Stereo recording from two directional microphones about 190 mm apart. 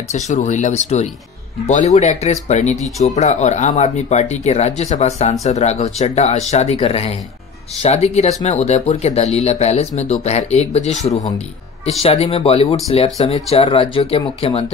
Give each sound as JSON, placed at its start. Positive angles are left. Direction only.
{"t": 0.1, "sound": "speech", "side_deg": 40}